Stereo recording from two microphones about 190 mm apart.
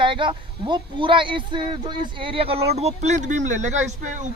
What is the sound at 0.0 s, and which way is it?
Speech, 25° right (ahead or behind).